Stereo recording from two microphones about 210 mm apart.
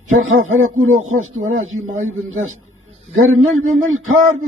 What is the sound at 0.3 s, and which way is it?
A man's voice, 75° right (ahead or behind).